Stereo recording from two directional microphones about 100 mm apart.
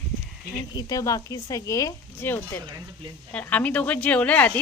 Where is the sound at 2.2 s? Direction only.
20° left (ahead or behind).